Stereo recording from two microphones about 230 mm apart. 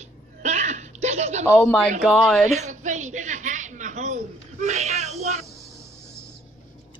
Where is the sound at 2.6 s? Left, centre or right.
Right.